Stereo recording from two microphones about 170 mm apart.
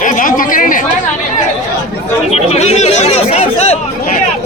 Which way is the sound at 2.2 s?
40° left (ahead or behind).